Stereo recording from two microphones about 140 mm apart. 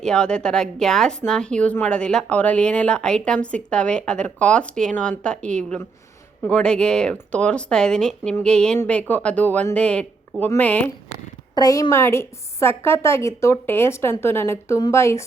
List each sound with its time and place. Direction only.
0.0 s a woman's voice: 5° left (ahead or behind)
11.5 s a woman's voice: 25° left (ahead or behind)